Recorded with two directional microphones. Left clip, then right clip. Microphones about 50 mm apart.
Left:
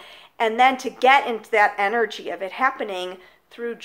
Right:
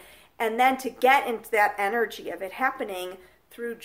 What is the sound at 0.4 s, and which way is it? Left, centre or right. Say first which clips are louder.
A woman's voice: left 5 dB; right.